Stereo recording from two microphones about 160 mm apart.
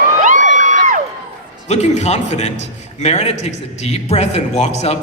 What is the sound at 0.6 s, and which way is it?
Music, 50° right (ahead or behind).